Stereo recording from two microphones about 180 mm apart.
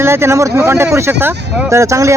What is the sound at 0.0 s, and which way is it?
Speech, 15° right (ahead or behind).